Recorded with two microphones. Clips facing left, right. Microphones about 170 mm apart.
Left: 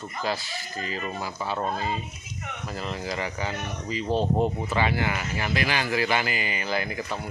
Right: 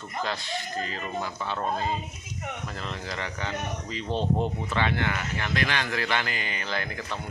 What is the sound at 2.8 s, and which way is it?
Speech, 5° left (ahead or behind).